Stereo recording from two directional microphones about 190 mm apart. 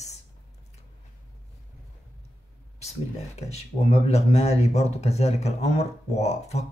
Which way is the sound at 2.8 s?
35° left (ahead or behind).